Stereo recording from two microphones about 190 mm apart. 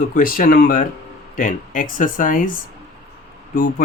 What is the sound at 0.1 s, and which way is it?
Speech, 45° left (ahead or behind).